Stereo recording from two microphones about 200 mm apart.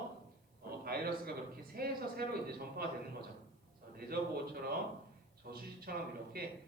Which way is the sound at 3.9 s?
50° right (ahead or behind).